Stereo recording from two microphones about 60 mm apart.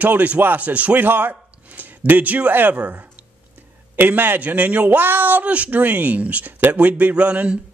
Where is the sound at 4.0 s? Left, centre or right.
Right.